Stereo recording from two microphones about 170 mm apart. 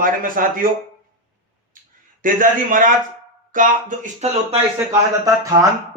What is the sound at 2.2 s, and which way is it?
A man's voice, 55° right (ahead or behind).